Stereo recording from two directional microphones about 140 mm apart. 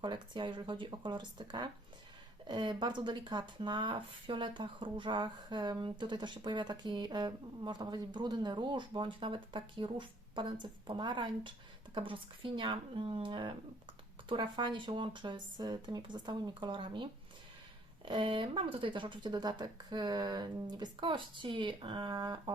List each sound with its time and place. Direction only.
0.0 s speech: 35° right (ahead or behind)